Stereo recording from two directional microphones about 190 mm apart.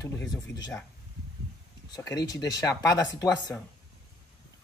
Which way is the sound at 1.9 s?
20° left (ahead or behind).